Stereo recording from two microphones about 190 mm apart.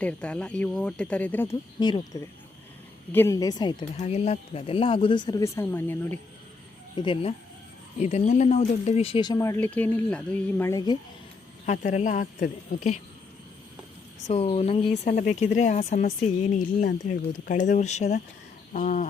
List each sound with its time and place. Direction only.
0.0 s speech: 5° left (ahead or behind)
1.8 s speech: 20° left (ahead or behind)
3.9 s speech: 35° left (ahead or behind); by 6.1 s 10° left (ahead or behind)
6.9 s speech: 25° left (ahead or behind)
11.6 s speech: 40° left (ahead or behind)
14.3 s speech: 35° left (ahead or behind)
17.5 s speech: 40° left (ahead or behind)
18.7 s insect: 45° left (ahead or behind)